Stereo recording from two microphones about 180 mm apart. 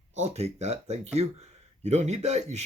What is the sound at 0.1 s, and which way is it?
Speech, 40° right (ahead or behind).